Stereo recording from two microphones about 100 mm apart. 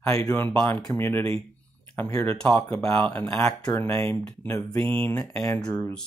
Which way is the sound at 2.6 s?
35° left (ahead or behind).